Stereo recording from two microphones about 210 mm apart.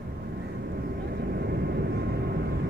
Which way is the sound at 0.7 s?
50° right (ahead or behind).